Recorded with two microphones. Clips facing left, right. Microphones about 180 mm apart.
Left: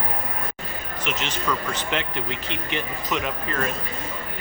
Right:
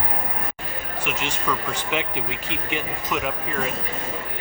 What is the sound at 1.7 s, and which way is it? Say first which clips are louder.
Speech: right 1 dB; 10° right (ahead or behind).